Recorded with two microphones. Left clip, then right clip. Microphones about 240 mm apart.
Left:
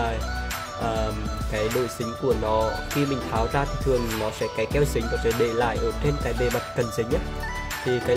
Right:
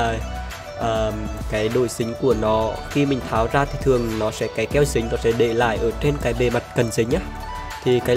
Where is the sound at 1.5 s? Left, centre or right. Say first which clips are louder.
Right 5 dB; right.